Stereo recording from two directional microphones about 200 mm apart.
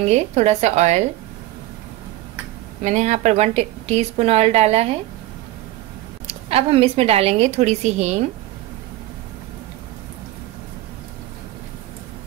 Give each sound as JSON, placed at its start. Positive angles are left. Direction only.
{"t": 0.1, "sound": "a woman's voice", "side_deg": -35}
{"t": 2.8, "sound": "a woman's voice", "side_deg": -35}
{"t": 6.2, "sound": "a woman's voice", "side_deg": -30}